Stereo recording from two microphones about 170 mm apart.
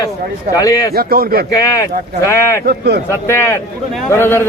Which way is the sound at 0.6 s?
20° left (ahead or behind).